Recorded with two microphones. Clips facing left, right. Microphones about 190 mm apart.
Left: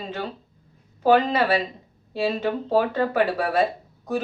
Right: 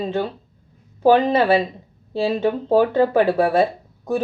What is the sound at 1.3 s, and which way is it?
Speech, 30° right (ahead or behind).